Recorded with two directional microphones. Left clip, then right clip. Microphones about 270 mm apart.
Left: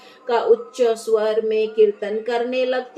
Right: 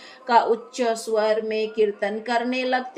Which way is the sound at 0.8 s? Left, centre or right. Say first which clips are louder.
Left 4 dB; right.